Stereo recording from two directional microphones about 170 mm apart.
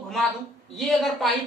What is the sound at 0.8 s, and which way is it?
Speech, centre (ahead or behind).